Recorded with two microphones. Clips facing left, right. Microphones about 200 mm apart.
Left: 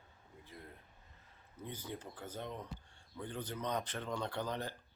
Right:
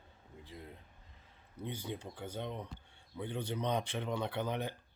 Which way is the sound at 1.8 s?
15° right (ahead or behind).